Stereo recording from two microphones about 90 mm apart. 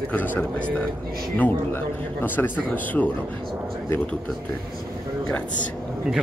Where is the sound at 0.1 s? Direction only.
15° left (ahead or behind).